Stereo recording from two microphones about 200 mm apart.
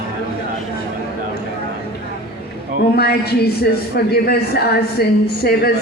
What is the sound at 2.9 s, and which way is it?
A woman's voice, 55° left (ahead or behind).